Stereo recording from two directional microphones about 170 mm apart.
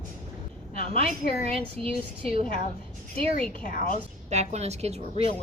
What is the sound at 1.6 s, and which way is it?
Speech, 35° right (ahead or behind).